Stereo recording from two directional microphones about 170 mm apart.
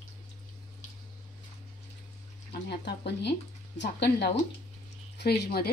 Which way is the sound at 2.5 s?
75° left (ahead or behind).